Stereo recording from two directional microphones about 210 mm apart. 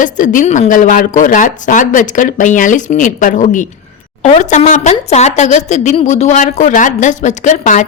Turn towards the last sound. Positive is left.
turn(degrees=35)  # may be behind; listen again after turning